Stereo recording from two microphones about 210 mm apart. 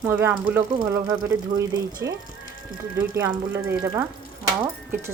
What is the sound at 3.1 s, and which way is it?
Speech, 10° right (ahead or behind).